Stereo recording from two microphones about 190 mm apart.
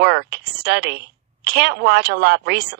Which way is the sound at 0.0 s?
60° right (ahead or behind).